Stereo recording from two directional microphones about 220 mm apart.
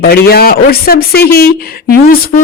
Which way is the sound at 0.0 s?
45° left (ahead or behind).